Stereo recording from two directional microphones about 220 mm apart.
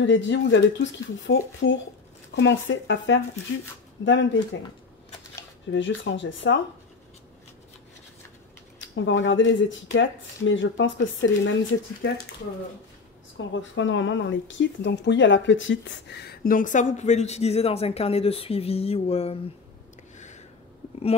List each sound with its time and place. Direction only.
0.0 s speech: 55° left (ahead or behind)
5.7 s speech: 55° left (ahead or behind)
8.7 s speech: 55° left (ahead or behind)
13.5 s speech: 55° left (ahead or behind); by 19.3 s 25° left (ahead or behind)